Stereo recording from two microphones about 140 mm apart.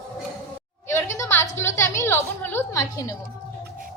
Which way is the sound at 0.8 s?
20° left (ahead or behind).